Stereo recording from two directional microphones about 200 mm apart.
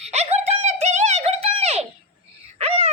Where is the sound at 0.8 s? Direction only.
35° right (ahead or behind).